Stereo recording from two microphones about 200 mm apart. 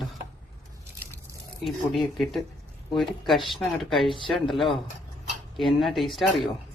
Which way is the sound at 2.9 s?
Centre (ahead or behind).